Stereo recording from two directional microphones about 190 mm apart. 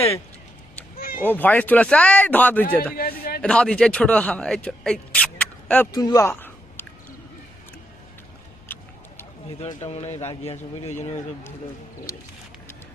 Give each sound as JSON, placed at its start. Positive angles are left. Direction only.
{"t": 0.9, "sound": "cat", "side_deg": 50}
{"t": 1.2, "sound": "speech", "side_deg": 10}
{"t": 2.9, "sound": "speech", "side_deg": 50}
{"t": 3.4, "sound": "speech", "side_deg": 5}
{"t": 8.6, "sound": "a sound", "side_deg": 10}
{"t": 9.6, "sound": "speech", "side_deg": 35}